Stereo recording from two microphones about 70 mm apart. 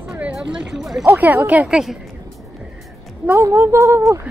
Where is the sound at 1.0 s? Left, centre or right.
Right.